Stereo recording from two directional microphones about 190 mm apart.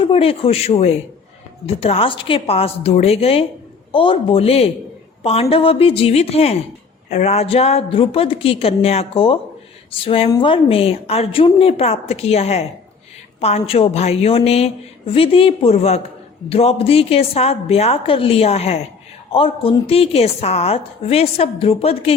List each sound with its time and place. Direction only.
0.0 s a woman's voice: 30° left (ahead or behind)